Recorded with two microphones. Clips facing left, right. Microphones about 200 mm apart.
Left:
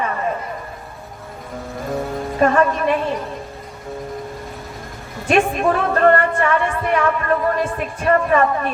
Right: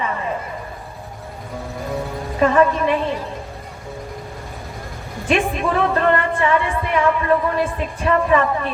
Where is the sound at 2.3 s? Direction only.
45° left (ahead or behind).